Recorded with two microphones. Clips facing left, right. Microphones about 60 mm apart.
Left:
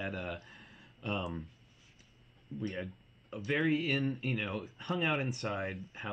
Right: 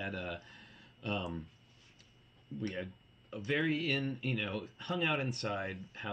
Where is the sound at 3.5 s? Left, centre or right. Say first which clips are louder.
Left 2 dB; centre.